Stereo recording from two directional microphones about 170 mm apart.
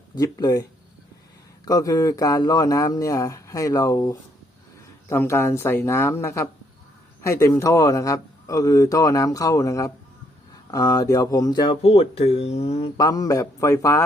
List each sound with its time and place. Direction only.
0.2 s a man's voice: 20° left (ahead or behind)
1.6 s a man's voice: 20° left (ahead or behind)
11.8 s speech: 35° left (ahead or behind)
13.0 s a man's voice: 20° left (ahead or behind)